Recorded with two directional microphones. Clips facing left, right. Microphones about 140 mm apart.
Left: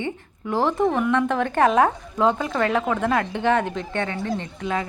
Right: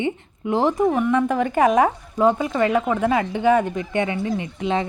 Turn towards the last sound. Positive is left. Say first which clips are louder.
# right 3 dB
turn(degrees=-10)  # may be behind; listen again after turning